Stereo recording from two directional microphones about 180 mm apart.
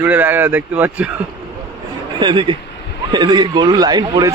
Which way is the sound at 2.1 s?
25° right (ahead or behind).